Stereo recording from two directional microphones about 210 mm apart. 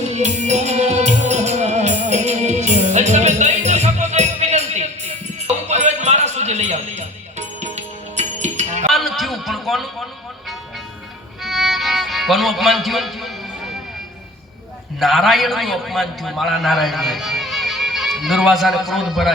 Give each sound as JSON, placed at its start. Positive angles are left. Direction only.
{"t": 0.0, "sound": "music", "side_deg": -30}
{"t": 8.9, "sound": "a sound", "side_deg": 0}
{"t": 11.4, "sound": "music", "side_deg": 0}
{"t": 14.9, "sound": "a man's voice", "side_deg": 0}